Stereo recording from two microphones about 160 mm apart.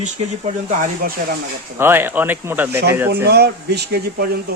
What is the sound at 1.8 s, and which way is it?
Speech, 15° right (ahead or behind).